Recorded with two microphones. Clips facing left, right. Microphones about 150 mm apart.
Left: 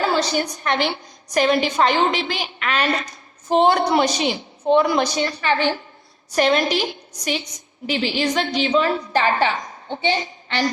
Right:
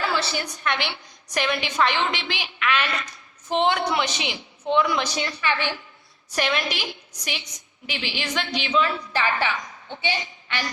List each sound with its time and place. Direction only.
0.0 s a woman's voice: 40° left (ahead or behind)